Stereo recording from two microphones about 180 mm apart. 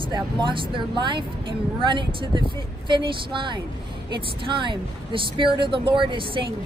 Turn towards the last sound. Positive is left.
turn(degrees=-30)  # may be behind; listen again after turning